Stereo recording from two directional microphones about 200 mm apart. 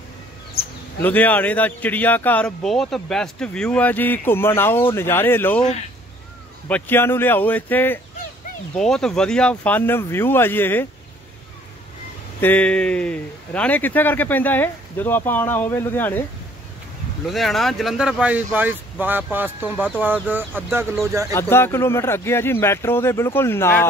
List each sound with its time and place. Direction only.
1.0 s speech: 10° left (ahead or behind)
6.7 s speech: 10° left (ahead or behind)
12.4 s speech: 10° left (ahead or behind)
17.3 s speech: centre (ahead or behind)
21.3 s speech: 10° left (ahead or behind)